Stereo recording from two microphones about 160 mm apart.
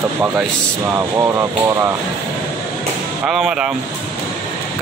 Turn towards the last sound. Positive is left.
turn(degrees=-5)  # may be behind; listen again after turning